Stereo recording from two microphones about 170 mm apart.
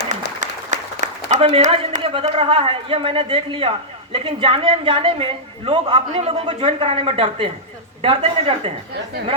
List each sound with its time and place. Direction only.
0.3 s applause: 45° right (ahead or behind)
2.2 s a man's voice: 35° right (ahead or behind)